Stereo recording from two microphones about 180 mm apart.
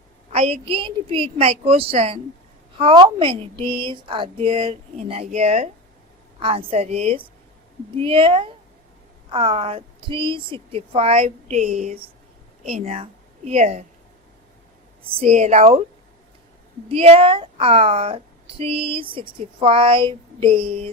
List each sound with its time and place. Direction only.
0.3 s a woman's voice: 35° right (ahead or behind)
15.1 s a woman's voice: 35° right (ahead or behind)
16.9 s a woman's voice: 35° right (ahead or behind)